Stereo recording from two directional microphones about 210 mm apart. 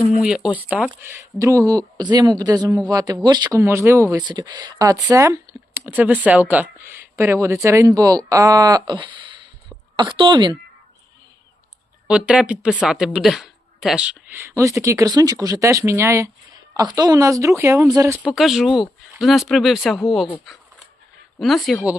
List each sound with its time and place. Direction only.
0.2 s a woman's voice: 5° right (ahead or behind); by 10.6 s 20° right (ahead or behind)
12.0 s speech: 5° right (ahead or behind)
18.3 s speech: centre (ahead or behind)